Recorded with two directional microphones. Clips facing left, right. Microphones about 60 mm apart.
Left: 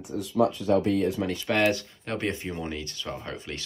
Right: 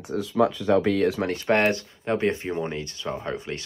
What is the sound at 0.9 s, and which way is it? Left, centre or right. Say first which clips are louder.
Speech: right 3 dB; right.